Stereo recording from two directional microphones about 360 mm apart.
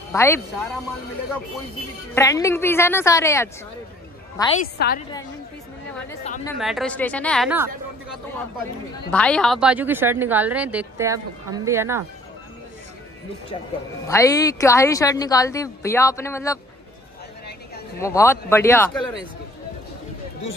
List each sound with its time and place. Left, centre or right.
0.1 s a woman's voice: centre
2.1 s a woman's voice: centre
4.7 s a woman's voice: left
6.4 s speech: centre
14.0 s a woman's voice: centre
17.9 s a woman's voice: centre